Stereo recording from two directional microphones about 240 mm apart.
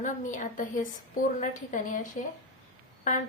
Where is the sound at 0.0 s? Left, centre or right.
Left.